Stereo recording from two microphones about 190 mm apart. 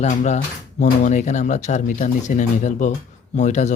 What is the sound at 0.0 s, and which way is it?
A man's voice, 40° left (ahead or behind).